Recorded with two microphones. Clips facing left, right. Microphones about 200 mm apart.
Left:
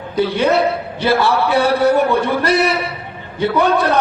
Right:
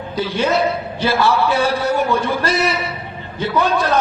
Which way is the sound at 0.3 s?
60° left (ahead or behind).